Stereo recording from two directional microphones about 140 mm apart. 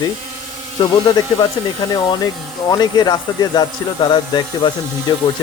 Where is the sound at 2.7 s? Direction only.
30° left (ahead or behind).